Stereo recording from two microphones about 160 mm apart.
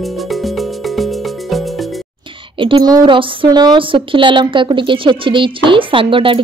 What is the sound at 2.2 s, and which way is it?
A woman's voice, 30° right (ahead or behind).